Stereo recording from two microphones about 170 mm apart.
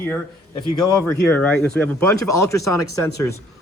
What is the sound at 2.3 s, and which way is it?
Speech, 20° left (ahead or behind).